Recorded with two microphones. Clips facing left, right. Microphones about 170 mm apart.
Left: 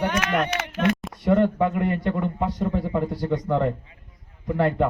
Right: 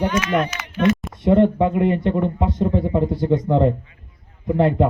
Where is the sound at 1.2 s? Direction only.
20° right (ahead or behind).